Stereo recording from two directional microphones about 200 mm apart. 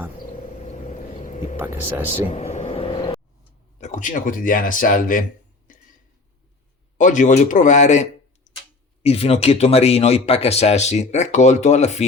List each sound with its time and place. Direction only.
0.7 s a sound: 35° left (ahead or behind)
1.5 s speech: 10° right (ahead or behind)
2.3 s vehicle: 35° left (ahead or behind)
3.8 s speech: 35° left (ahead or behind)
5.7 s a sound: 40° left (ahead or behind)
7.0 s speech: 40° left (ahead or behind)
9.0 s speech: 30° left (ahead or behind)